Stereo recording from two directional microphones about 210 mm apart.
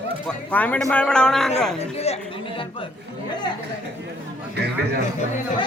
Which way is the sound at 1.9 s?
30° left (ahead or behind).